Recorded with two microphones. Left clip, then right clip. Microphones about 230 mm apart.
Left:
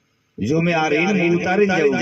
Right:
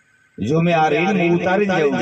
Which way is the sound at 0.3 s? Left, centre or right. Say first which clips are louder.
Right 2 dB; right.